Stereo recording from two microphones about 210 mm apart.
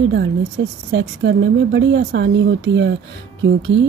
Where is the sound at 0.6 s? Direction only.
60° right (ahead or behind).